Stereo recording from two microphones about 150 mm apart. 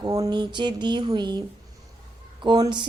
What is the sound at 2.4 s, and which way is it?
Speech, 30° right (ahead or behind).